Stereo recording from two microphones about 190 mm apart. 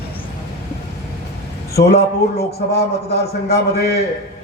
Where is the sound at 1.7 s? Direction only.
55° left (ahead or behind).